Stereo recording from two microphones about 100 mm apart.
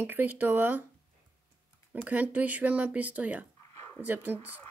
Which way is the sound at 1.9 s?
15° right (ahead or behind).